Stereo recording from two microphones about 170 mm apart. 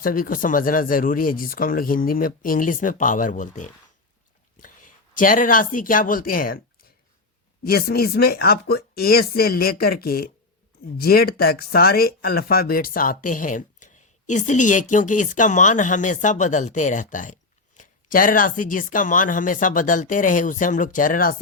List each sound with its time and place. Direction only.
0.0 s speech: 55° left (ahead or behind)
7.6 s speech: 65° left (ahead or behind)